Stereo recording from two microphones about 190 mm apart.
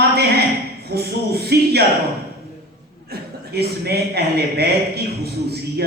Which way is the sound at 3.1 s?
55° right (ahead or behind).